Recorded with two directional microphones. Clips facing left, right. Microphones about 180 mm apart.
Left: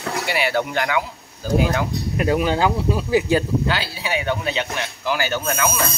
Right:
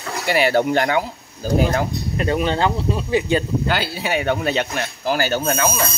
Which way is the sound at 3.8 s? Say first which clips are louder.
Right 3 dB; 50° right (ahead or behind).